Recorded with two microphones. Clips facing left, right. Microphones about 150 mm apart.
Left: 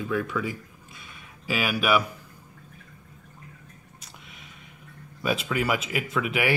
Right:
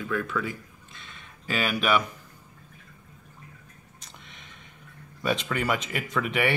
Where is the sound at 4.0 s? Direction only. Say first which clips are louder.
Right 1 dB; 5° left (ahead or behind).